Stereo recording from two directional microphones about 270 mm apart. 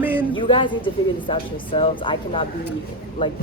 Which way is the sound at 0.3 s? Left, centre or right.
Centre.